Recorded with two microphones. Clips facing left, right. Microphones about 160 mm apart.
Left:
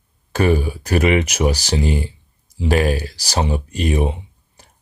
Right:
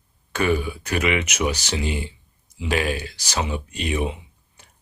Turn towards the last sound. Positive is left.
turn(degrees=40)  # may be behind; listen again after turning